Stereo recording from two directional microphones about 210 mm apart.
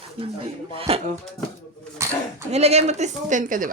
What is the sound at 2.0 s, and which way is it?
Dog, 15° right (ahead or behind).